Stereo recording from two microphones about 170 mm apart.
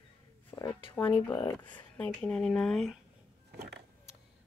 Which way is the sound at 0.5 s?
10° left (ahead or behind).